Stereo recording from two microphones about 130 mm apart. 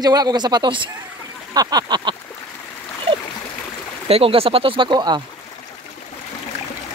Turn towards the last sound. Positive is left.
turn(degrees=-35)  # may be behind; listen again after turning